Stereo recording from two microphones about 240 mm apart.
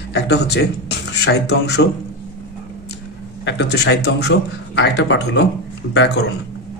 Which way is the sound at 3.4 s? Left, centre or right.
Left.